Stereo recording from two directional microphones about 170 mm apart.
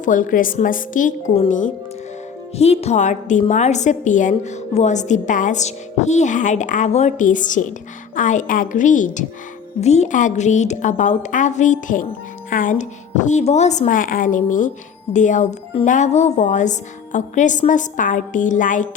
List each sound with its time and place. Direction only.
0.0 s a woman's voice: 50° left (ahead or behind)